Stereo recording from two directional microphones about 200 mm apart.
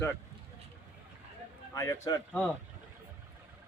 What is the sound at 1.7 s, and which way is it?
Speech, 15° left (ahead or behind).